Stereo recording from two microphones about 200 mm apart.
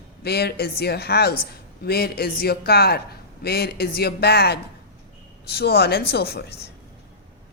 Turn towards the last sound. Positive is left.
turn(degrees=50)  # may be behind; listen again after turning